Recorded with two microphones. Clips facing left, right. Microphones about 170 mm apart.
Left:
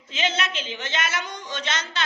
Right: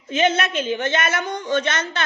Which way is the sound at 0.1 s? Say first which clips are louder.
Right 8 dB; 55° right (ahead or behind).